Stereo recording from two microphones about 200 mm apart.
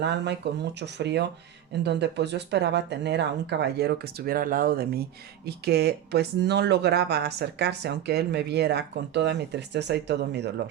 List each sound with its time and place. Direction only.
0.0 s speech: 60° right (ahead or behind)